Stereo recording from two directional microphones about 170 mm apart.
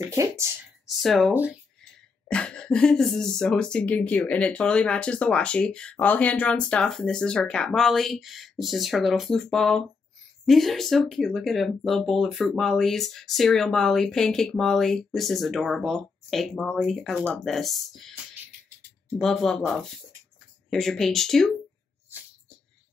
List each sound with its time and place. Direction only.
0.0 s speech: 15° right (ahead or behind)
0.8 s a sound: centre (ahead or behind)
1.3 s speech: 10° right (ahead or behind)
2.3 s speech: 5° left (ahead or behind)
19.1 s speech: centre (ahead or behind)
20.7 s speech: centre (ahead or behind)